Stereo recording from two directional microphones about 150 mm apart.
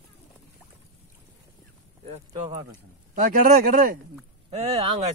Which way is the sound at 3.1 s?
70° right (ahead or behind).